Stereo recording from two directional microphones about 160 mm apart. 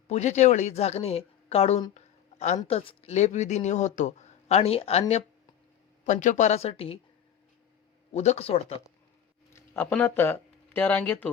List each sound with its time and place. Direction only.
0.1 s speech: 45° left (ahead or behind)
1.9 s a sound: 45° left (ahead or behind)
2.6 s speech: 35° left (ahead or behind)
8.1 s speech: 45° left (ahead or behind)
9.5 s speech: 15° left (ahead or behind)